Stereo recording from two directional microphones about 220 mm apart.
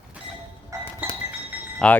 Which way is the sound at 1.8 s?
5° left (ahead or behind).